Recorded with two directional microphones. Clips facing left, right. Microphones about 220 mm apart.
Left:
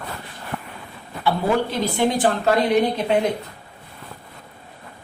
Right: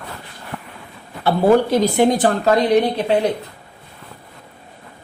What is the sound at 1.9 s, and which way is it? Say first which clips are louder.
Speech: right 4 dB; 40° right (ahead or behind).